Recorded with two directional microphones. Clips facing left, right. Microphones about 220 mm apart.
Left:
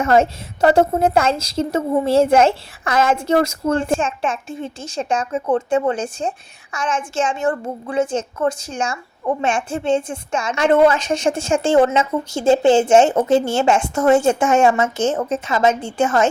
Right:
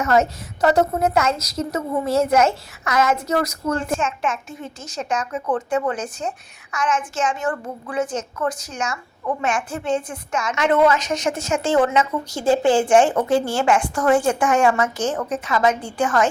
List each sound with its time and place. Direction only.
0.0 s a woman's voice: 30° left (ahead or behind)